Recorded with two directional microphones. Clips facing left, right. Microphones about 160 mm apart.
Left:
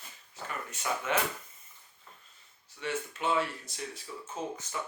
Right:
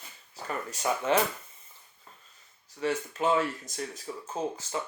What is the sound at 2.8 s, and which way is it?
Speech, 40° right (ahead or behind).